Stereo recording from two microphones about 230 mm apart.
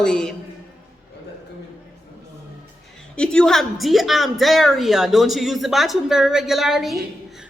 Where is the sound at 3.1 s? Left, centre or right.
Centre.